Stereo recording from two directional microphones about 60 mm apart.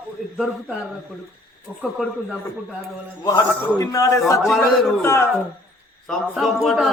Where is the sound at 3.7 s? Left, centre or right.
Left.